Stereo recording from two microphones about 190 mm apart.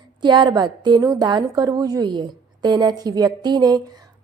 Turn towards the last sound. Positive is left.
turn(degrees=-20)  # may be behind; listen again after turning